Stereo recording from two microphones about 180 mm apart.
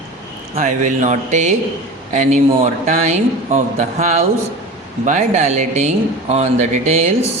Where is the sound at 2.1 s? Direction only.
40° right (ahead or behind).